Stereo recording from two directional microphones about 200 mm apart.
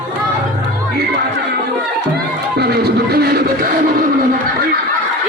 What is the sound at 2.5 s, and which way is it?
Music, 50° right (ahead or behind).